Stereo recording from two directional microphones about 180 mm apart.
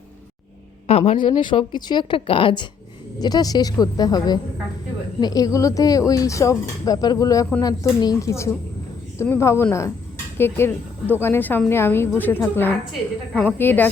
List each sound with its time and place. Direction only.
0.9 s a woman's voice: 35° left (ahead or behind); by 13.9 s 10° left (ahead or behind)